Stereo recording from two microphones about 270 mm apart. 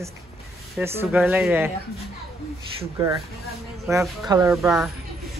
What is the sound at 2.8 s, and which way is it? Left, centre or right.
Speech, centre.